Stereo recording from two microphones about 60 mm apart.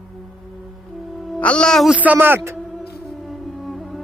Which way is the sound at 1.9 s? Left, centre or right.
Right.